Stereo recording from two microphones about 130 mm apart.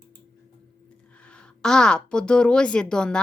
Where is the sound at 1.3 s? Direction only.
5° left (ahead or behind).